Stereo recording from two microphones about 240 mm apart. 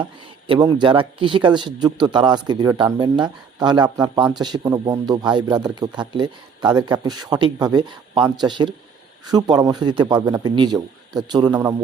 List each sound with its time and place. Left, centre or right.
0.0 s speech: right